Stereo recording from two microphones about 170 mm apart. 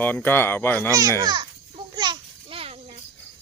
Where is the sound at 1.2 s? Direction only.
25° right (ahead or behind).